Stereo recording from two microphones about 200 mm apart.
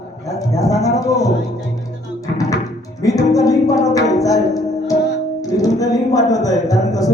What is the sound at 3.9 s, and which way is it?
Music, 15° left (ahead or behind).